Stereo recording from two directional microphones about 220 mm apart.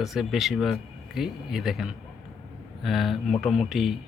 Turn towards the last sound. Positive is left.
turn(degrees=0)  # may be behind; listen again after turning